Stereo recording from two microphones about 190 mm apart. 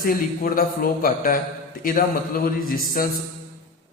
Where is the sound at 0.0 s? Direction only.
50° left (ahead or behind).